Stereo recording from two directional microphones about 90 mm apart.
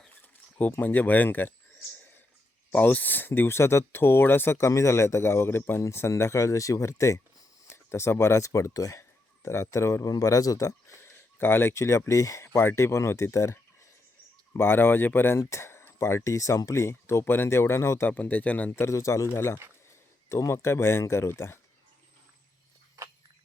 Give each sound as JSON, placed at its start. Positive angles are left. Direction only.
{"t": 0.6, "sound": "speech", "side_deg": 20}
{"t": 2.7, "sound": "speech", "side_deg": 15}
{"t": 18.1, "sound": "speech", "side_deg": 15}
{"t": 18.9, "sound": "speech", "side_deg": 35}